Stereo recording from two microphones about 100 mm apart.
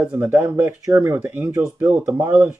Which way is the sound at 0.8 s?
25° right (ahead or behind).